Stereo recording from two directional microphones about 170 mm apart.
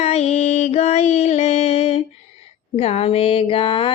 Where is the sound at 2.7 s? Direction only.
35° left (ahead or behind).